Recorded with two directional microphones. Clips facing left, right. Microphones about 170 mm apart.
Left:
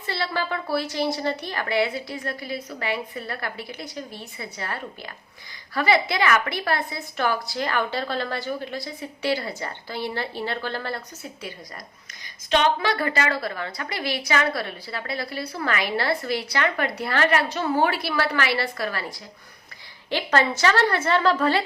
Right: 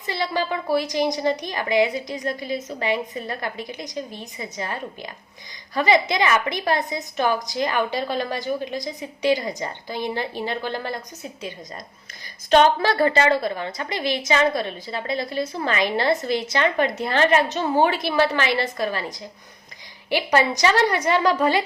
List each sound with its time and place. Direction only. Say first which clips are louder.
0.0 s a woman's voice: right 3 dB; 15° right (ahead or behind)
12.5 s a woman's voice: right 5 dB; 40° right (ahead or behind); by 21.6 s 15° right (ahead or behind)